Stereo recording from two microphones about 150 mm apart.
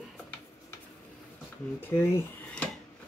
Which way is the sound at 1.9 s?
15° left (ahead or behind).